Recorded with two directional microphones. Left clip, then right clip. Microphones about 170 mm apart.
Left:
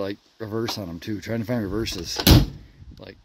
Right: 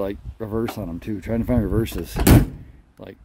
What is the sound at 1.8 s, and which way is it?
Speech, 20° right (ahead or behind).